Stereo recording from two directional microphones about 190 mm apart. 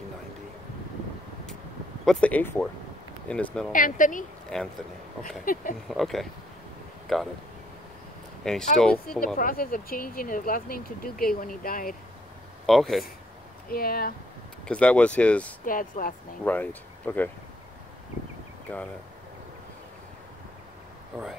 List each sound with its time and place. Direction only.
2.0 s speech: 5° left (ahead or behind)
3.7 s speech: 45° left (ahead or behind)
4.5 s speech: centre (ahead or behind)
5.4 s speech: 45° left (ahead or behind)
5.9 s speech: centre (ahead or behind)
8.7 s speech: 5° left (ahead or behind)
9.2 s speech: 45° left (ahead or behind)
12.6 s speech: centre (ahead or behind)
13.7 s speech: 50° left (ahead or behind)
14.7 s speech: 5° left (ahead or behind)
15.6 s speech: 45° left (ahead or behind)
16.4 s speech: 10° left (ahead or behind)